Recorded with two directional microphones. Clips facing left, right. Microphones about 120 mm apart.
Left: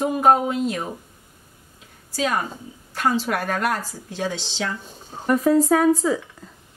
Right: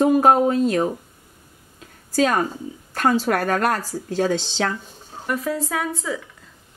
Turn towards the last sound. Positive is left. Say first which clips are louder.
# left 8 dB
turn(degrees=40)  # may be behind; listen again after turning